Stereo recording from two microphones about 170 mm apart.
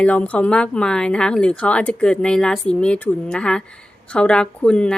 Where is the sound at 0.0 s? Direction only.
10° left (ahead or behind).